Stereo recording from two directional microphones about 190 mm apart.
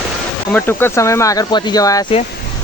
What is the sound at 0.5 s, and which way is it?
Speech, 10° left (ahead or behind).